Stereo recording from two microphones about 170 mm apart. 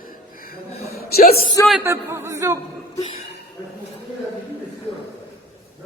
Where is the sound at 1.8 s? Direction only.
15° right (ahead or behind).